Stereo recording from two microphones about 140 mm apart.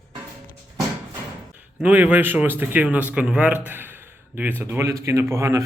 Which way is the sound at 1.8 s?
10° right (ahead or behind).